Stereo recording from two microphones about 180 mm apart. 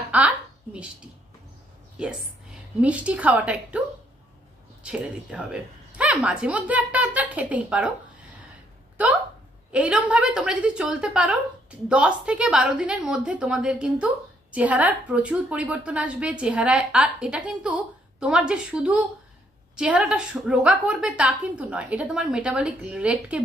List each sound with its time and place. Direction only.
0.1 s a sound: 5° right (ahead or behind)
2.0 s a woman's voice: 5° right (ahead or behind)
4.8 s a woman's voice: 5° right (ahead or behind)
9.7 s a woman's voice: 5° right (ahead or behind)